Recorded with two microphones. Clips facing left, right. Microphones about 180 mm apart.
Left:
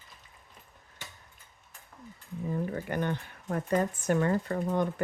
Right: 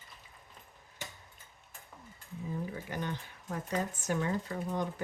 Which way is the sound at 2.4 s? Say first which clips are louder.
Left 6 dB; 55° left (ahead or behind).